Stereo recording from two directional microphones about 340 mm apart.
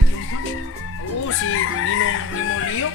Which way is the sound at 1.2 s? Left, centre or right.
Left.